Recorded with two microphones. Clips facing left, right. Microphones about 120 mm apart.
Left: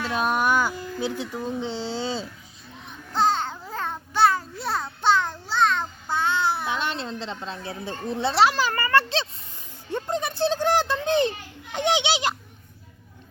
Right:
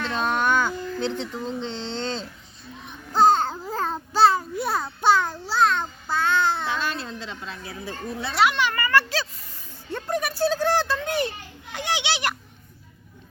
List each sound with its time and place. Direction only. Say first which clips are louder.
0.0 s speech: left 1 dB; 10° left (ahead or behind)
3.1 s babbling: right 5 dB; 45° right (ahead or behind)
4.4 s a sound: right 3 dB; 10° right (ahead or behind)
6.1 s a child's voice: right 2 dB; 15° left (ahead or behind)